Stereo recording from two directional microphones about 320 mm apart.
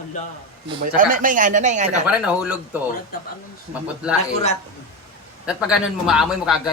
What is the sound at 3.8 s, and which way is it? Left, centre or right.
Speech, centre.